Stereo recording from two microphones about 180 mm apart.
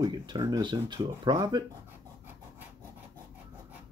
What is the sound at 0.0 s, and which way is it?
Speech, 20° right (ahead or behind).